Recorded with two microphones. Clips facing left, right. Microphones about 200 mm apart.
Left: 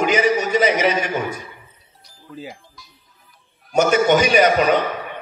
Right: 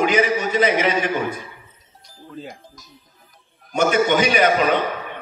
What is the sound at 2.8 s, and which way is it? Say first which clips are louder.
Speech: even; 45° right (ahead or behind).